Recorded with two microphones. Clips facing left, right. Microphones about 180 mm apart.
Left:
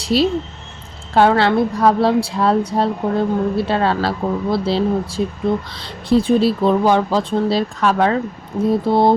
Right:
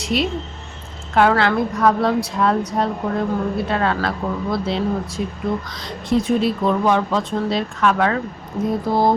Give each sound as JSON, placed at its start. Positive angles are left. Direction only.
{"t": 0.0, "sound": "speech", "side_deg": 35}
{"t": 8.9, "sound": "mantra", "side_deg": 25}